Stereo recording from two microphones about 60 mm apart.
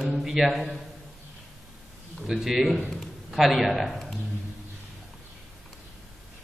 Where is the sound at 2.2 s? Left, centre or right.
Centre.